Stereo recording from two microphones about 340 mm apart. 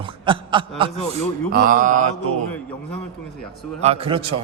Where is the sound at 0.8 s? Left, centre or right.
Centre.